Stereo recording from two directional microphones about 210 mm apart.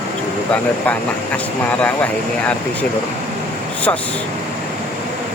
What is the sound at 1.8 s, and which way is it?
Speech, 5° left (ahead or behind).